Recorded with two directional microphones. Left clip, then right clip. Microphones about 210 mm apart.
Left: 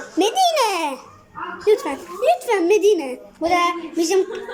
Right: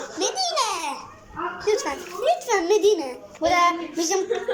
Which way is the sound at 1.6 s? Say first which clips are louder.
Left 6 dB; 20° left (ahead or behind).